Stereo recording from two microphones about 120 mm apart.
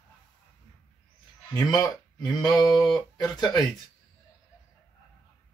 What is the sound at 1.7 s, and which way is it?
Speech, 35° left (ahead or behind).